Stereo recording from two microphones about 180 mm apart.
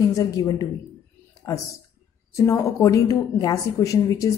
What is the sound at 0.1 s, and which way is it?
Speech, 20° left (ahead or behind).